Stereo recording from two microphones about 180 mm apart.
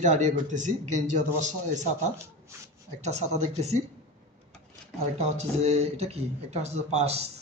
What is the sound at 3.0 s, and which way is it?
Speech, 40° right (ahead or behind).